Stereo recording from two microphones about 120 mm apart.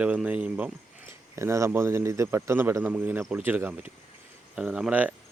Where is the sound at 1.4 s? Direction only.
25° right (ahead or behind).